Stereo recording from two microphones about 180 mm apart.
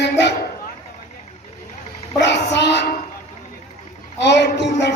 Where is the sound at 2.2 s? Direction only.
70° left (ahead or behind).